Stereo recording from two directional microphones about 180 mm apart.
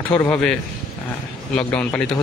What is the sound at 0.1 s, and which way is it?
Speech, 10° left (ahead or behind).